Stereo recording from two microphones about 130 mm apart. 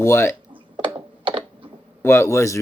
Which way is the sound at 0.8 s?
40° right (ahead or behind).